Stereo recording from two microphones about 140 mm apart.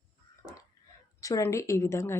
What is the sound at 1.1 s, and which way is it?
A woman's voice, 25° left (ahead or behind).